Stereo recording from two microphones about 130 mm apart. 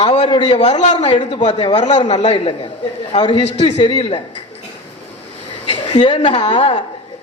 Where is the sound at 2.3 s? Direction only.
45° left (ahead or behind).